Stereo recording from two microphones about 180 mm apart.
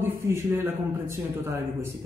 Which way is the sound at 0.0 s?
10° right (ahead or behind).